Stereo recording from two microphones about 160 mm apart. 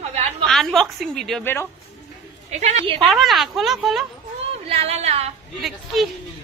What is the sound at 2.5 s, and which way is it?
Speech, 45° right (ahead or behind).